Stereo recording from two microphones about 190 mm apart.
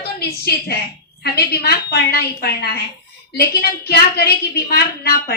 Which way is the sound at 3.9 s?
55° left (ahead or behind).